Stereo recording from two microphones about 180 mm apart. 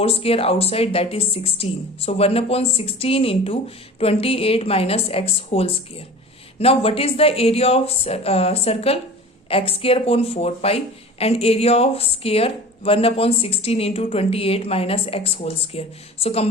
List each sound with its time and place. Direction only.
0.0 s speech: 35° left (ahead or behind)